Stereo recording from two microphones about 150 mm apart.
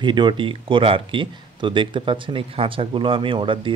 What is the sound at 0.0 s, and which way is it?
Speech, 30° right (ahead or behind).